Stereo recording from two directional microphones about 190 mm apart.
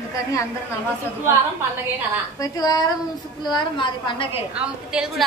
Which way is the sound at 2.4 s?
20° left (ahead or behind).